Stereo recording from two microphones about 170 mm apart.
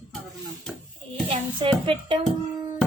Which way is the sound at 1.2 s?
30° right (ahead or behind).